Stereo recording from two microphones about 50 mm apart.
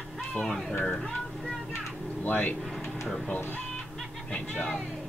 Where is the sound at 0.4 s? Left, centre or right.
Centre.